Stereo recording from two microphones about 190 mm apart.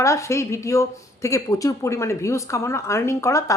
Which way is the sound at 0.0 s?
15° left (ahead or behind).